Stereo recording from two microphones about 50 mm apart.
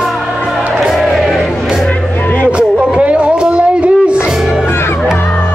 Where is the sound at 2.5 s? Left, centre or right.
Right.